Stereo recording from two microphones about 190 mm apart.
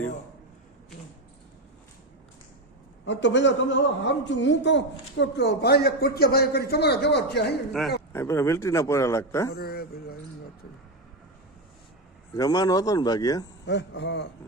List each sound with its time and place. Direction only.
3.0 s a man's voice: 70° left (ahead or behind)
8.1 s a man's voice: 15° left (ahead or behind)
9.6 s a man's voice: 55° left (ahead or behind)
12.3 s speech: 20° left (ahead or behind)
13.7 s a man's voice: 65° left (ahead or behind)